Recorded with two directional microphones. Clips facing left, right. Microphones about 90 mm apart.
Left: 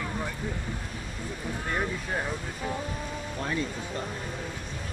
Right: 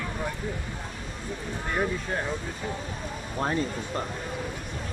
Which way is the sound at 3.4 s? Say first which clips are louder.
Right 4 dB; 40° right (ahead or behind).